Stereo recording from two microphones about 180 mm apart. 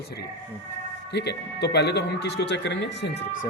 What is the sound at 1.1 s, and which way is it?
Speech, 70° left (ahead or behind).